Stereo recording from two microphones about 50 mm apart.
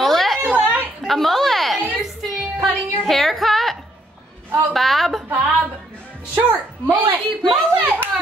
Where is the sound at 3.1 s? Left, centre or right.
Centre.